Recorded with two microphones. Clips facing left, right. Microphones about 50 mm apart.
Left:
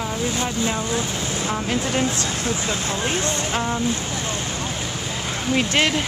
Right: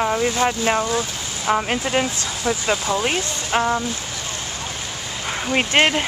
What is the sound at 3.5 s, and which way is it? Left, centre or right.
Speech, right.